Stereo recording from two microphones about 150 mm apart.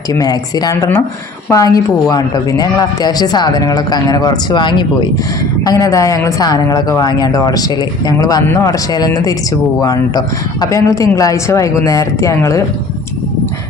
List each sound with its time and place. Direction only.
0.1 s a woman's voice: 25° left (ahead or behind)